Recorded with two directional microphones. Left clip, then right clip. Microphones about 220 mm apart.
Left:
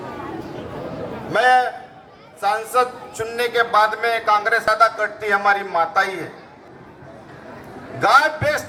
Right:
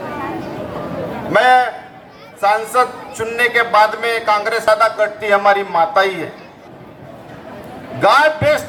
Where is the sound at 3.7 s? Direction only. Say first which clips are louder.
Right 4 dB; 65° right (ahead or behind).